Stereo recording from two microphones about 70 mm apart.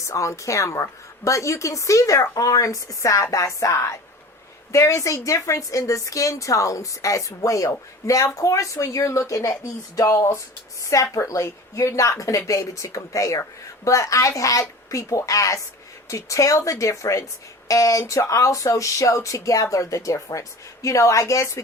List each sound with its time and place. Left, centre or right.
0.0 s a woman's voice: left
10.2 s a woman's voice: left